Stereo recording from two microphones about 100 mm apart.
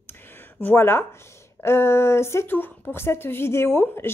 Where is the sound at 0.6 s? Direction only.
25° left (ahead or behind).